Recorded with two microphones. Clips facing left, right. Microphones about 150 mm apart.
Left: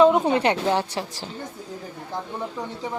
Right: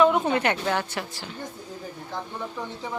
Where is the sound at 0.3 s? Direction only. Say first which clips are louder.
Left 3 dB; 30° left (ahead or behind).